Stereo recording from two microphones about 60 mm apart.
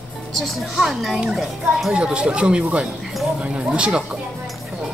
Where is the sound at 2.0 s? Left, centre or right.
Centre.